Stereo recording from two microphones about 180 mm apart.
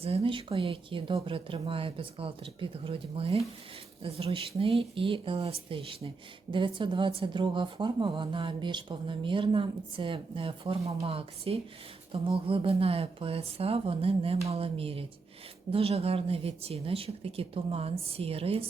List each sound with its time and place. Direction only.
0.0 s speech: 35° right (ahead or behind)